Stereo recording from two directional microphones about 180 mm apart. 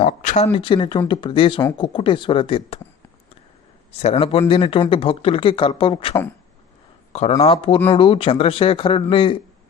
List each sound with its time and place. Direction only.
0.1 s speech: 45° left (ahead or behind)
3.9 s speech: 40° left (ahead or behind)